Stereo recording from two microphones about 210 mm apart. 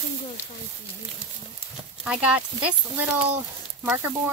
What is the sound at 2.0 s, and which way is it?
Speech, 5° right (ahead or behind).